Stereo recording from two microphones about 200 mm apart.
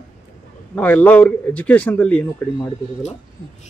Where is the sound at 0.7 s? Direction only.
10° left (ahead or behind).